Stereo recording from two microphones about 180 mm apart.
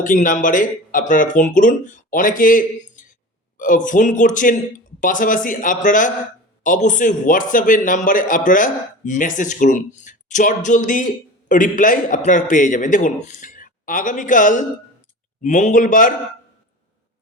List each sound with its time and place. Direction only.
0.0 s a man's voice: 45° left (ahead or behind)